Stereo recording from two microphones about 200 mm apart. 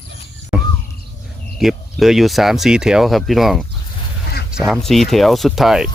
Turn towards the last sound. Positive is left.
turn(degrees=0)  # may be behind; listen again after turning